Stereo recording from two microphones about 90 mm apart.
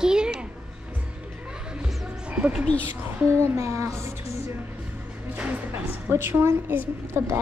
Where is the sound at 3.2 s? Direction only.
30° right (ahead or behind).